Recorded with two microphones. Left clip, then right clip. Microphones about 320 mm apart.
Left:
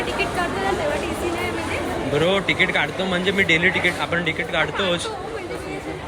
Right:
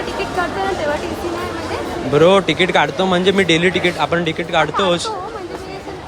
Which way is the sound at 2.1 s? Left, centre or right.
Centre.